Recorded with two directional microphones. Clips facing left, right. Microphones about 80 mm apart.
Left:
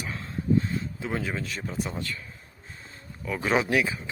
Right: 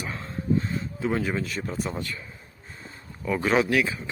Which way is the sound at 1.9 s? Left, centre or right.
Centre.